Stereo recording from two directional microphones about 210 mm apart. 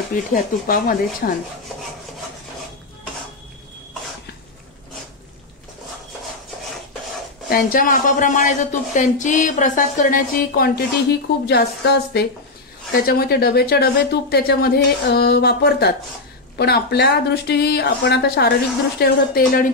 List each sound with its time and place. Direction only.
0.1 s speech: 40° left (ahead or behind)
7.4 s speech: 45° left (ahead or behind)